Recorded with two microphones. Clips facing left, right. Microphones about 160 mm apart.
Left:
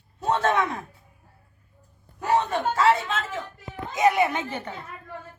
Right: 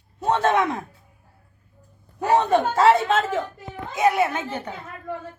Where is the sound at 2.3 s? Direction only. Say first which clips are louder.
Right 4 dB; 55° right (ahead or behind).